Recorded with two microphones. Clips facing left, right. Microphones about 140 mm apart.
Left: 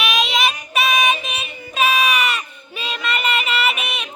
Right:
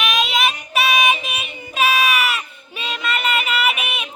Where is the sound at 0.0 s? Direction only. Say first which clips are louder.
Even; centre (ahead or behind).